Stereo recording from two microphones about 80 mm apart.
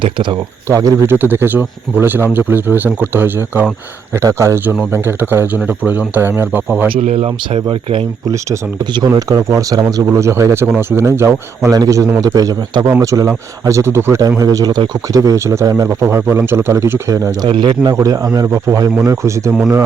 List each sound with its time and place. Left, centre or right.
0.0 s speech: right
0.7 s a man's voice: right
1.0 s speech: right
4.1 s a man's voice: right
7.5 s speech: right
8.8 s speech: right
9.5 s a man's voice: right
11.7 s a man's voice: right
14.2 s a man's voice: right
17.4 s a man's voice: right
18.0 s a man's voice: right